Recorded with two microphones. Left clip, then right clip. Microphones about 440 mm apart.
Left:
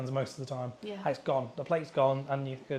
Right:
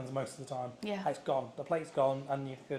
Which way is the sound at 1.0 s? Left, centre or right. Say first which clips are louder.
Left 4 dB; left.